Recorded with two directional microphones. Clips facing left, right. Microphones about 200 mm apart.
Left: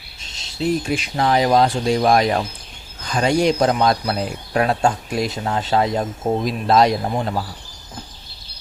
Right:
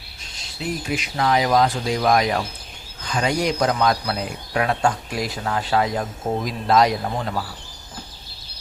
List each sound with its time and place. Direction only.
0.3 s speech: 30° left (ahead or behind)